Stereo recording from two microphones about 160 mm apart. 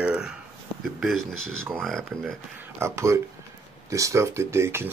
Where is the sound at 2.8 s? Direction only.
15° right (ahead or behind).